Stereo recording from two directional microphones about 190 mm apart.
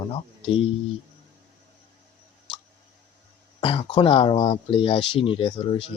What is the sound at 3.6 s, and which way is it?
Speech, 25° left (ahead or behind).